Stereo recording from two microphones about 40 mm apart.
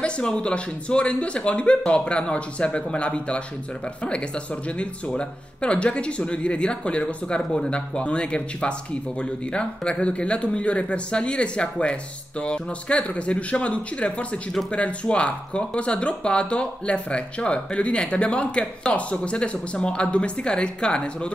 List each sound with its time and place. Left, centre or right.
0.0 s speech: left
4.6 s speech: left